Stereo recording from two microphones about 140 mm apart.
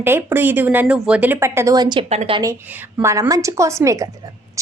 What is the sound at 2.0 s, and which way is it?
Speech, 45° right (ahead or behind).